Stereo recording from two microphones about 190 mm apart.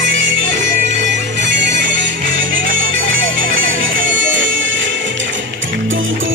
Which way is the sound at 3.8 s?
75° right (ahead or behind).